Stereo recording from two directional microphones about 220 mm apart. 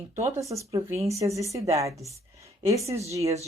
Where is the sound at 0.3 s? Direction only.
15° right (ahead or behind).